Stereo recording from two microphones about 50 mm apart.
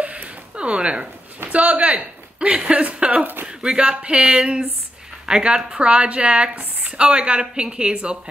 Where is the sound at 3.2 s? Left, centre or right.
Right.